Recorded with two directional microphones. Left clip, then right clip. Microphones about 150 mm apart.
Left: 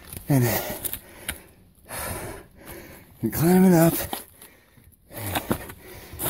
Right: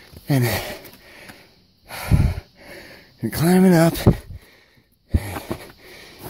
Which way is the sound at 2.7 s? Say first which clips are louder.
Right 4 dB; 50° right (ahead or behind).